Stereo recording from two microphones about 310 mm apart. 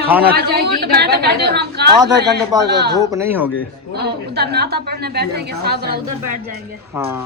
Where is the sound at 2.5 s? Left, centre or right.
Centre.